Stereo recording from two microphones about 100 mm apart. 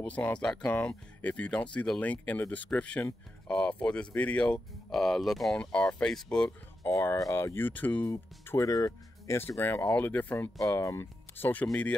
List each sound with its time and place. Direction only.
0.0 s speech: 15° left (ahead or behind)
5.6 s speech: 10° left (ahead or behind)
6.9 s speech: 30° left (ahead or behind)
9.6 s speech: 20° left (ahead or behind)
11.6 s speech: 10° left (ahead or behind)